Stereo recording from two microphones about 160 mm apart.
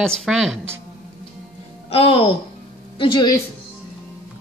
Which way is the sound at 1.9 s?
35° left (ahead or behind).